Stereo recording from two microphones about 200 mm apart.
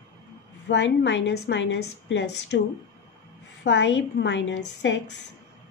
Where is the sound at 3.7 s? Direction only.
65° left (ahead or behind).